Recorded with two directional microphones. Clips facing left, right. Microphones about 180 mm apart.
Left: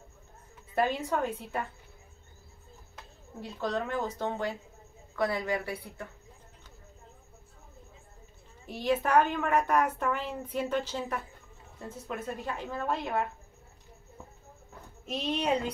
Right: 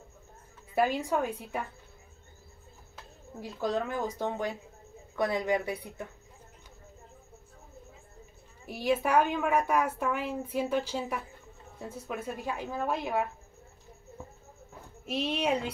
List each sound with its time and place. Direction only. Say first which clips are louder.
0.7 s a woman's voice: right 1 dB; 10° right (ahead or behind)
3.3 s a woman's voice: right 2 dB; 5° right (ahead or behind)
8.6 s a woman's voice: even; 10° right (ahead or behind)
15.0 s a woman's voice: even; 10° right (ahead or behind)